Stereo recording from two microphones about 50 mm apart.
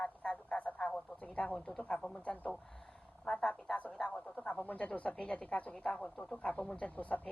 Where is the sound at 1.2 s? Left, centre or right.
Left.